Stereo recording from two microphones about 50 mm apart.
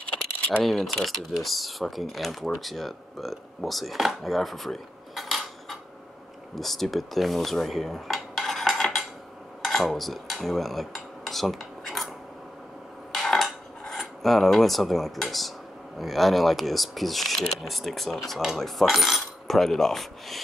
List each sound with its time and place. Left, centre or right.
0.0 s keys jangling: left
0.7 s speech: centre
6.5 s dishes: centre
9.6 s cutlery: centre
13.2 s cutlery: centre
16.0 s speech: centre